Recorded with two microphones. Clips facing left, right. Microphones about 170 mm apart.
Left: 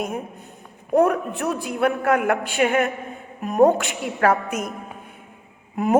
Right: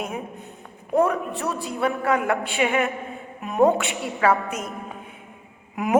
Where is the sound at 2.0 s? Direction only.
50° left (ahead or behind).